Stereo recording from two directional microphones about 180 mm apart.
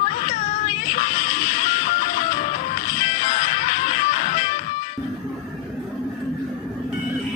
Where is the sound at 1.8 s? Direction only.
45° left (ahead or behind).